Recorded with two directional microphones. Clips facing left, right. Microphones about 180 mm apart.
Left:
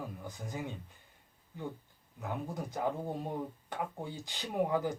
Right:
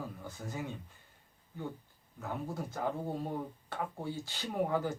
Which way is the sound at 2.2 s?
15° left (ahead or behind).